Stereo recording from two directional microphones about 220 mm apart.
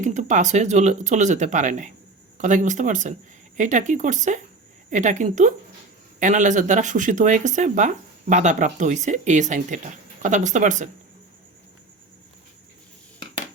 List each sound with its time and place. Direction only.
0.0 s speech: 35° right (ahead or behind)